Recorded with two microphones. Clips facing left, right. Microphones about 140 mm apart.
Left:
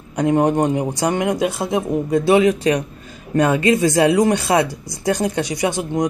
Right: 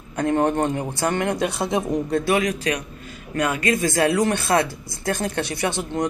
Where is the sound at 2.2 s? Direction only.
25° left (ahead or behind).